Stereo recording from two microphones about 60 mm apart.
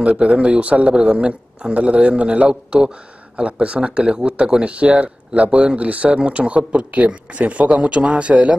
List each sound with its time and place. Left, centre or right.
0.0 s speech: centre